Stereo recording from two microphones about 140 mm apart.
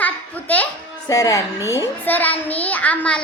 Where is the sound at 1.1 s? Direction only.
25° left (ahead or behind).